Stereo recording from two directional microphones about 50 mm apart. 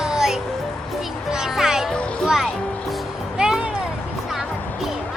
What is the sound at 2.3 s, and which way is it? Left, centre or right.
Music, centre.